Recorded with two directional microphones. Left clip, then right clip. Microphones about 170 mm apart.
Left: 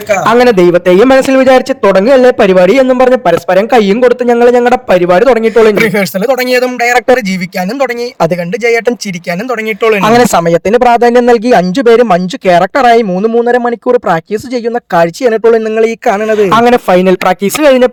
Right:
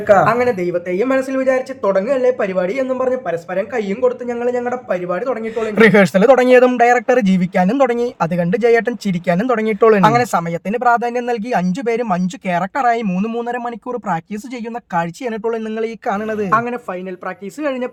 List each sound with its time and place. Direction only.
0.3 s a man's voice: 60° left (ahead or behind)
5.8 s speech: centre (ahead or behind)
6.4 s speech: 40° left (ahead or behind)
10.2 s speech: 45° left (ahead or behind)
13.1 s speech: 30° left (ahead or behind)
15.7 s speech: 35° left (ahead or behind)
16.5 s speech: 75° left (ahead or behind)